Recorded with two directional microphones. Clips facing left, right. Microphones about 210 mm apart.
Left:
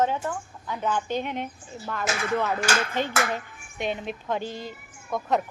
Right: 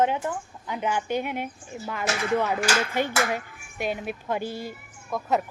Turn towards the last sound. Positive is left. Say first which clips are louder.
# even
turn(degrees=0)  # may be behind; listen again after turning